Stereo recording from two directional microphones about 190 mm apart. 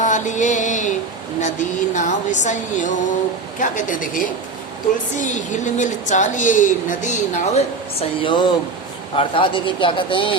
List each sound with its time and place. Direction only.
0.0 s music: 40° left (ahead or behind)
1.4 s a woman's voice: 40° left (ahead or behind)